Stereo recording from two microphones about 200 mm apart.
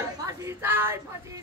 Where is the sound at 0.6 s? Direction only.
10° right (ahead or behind).